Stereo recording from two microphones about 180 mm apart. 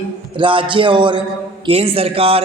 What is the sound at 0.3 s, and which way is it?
A man's voice, 30° right (ahead or behind).